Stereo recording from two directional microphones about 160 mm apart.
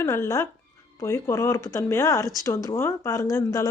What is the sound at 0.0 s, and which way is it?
Speech, 15° left (ahead or behind).